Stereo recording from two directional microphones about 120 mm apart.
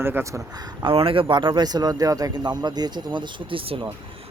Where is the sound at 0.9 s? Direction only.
50° right (ahead or behind).